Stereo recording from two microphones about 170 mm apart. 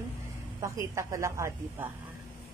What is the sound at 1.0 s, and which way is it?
Speech, 15° right (ahead or behind).